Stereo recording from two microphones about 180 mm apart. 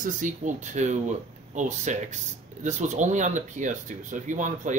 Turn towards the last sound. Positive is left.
turn(degrees=-45)  # may be behind; listen again after turning